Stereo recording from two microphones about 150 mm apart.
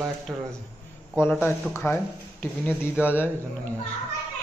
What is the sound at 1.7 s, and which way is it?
Speech, 15° left (ahead or behind).